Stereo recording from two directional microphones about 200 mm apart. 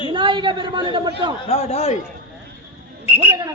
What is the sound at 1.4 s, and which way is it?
Speech, 30° left (ahead or behind).